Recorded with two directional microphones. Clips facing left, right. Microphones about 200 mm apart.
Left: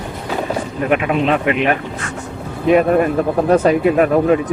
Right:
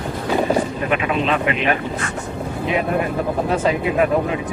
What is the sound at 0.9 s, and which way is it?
Speech, 55° left (ahead or behind).